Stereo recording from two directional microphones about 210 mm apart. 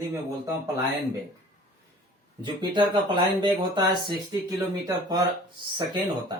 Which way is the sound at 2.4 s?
20° right (ahead or behind).